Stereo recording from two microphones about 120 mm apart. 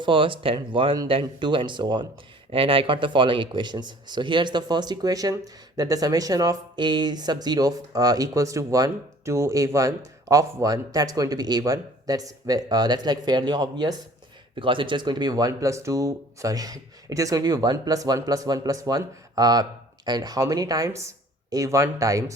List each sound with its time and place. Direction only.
0.0 s speech: 45° right (ahead or behind)
14.5 s speech: 45° right (ahead or behind); by 22.2 s 30° right (ahead or behind)